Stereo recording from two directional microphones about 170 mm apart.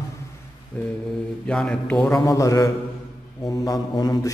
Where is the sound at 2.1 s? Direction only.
20° left (ahead or behind).